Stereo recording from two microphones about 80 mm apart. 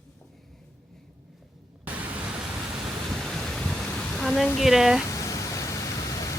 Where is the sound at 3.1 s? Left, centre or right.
Centre.